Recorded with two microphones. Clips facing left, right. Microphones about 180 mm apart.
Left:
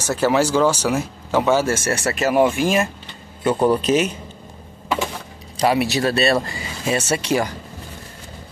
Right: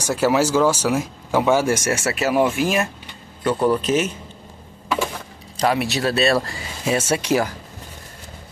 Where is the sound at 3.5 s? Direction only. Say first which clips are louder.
Left 2 dB; 20° left (ahead or behind).